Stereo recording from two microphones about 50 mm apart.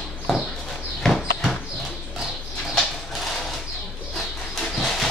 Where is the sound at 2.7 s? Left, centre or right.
Centre.